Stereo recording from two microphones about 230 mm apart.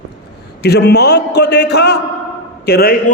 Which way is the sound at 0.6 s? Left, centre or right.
Left.